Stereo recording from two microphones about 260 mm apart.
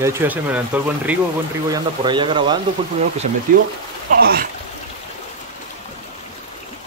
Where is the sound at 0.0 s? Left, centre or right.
Centre.